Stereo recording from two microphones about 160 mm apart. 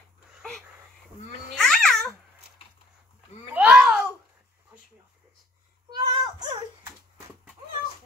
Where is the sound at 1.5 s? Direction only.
5° left (ahead or behind).